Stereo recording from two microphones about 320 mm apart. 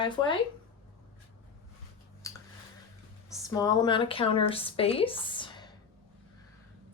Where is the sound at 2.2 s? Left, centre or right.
Centre.